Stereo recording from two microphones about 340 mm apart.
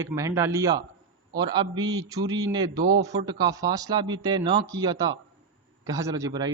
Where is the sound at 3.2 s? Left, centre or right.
Centre.